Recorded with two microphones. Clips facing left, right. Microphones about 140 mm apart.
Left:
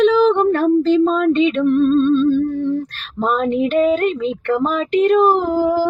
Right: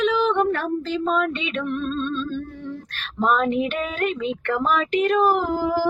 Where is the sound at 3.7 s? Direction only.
30° left (ahead or behind).